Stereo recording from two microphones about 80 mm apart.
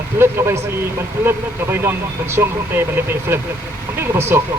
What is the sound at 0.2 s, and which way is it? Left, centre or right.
A man's voice, right.